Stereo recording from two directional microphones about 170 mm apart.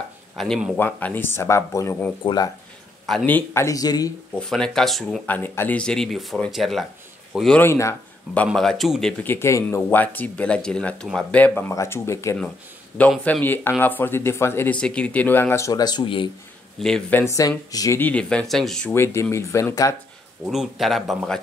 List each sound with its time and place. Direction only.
0.4 s speech: centre (ahead or behind)
0.7 s speech: 10° left (ahead or behind)
3.1 s speech: 5° left (ahead or behind); by 4.1 s 20° left (ahead or behind)
4.4 s speech: 5° left (ahead or behind)
5.2 s speech: 10° left (ahead or behind)
7.6 s speech: 15° left (ahead or behind)
8.5 s speech: centre (ahead or behind)
9.2 s speech: 15° left (ahead or behind); by 16.3 s 30° left (ahead or behind)
16.8 s speech: 5° left (ahead or behind)
17.2 s speech: 20° left (ahead or behind); by 18.9 s 5° left (ahead or behind)
18.9 s speech: 15° left (ahead or behind)
20.4 s speech: centre (ahead or behind)